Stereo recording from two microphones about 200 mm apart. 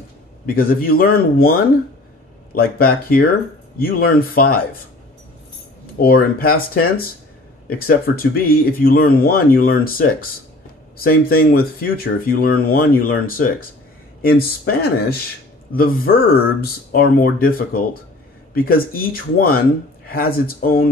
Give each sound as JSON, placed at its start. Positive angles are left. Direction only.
{"t": 0.5, "sound": "speech", "side_deg": 45}
{"t": 5.9, "sound": "speech", "side_deg": 50}
{"t": 14.7, "sound": "speech", "side_deg": 50}